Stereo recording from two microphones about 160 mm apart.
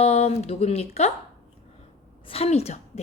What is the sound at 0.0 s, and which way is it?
Speech, 40° left (ahead or behind).